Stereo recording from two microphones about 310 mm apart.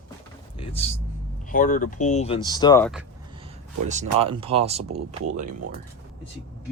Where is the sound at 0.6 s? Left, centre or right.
Centre.